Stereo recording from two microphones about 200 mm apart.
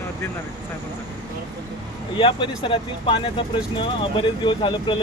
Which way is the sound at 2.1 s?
25° left (ahead or behind).